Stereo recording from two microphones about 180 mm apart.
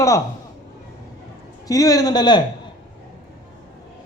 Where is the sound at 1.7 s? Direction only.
20° left (ahead or behind).